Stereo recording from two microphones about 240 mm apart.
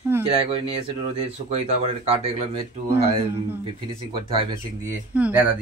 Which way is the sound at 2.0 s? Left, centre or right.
Right.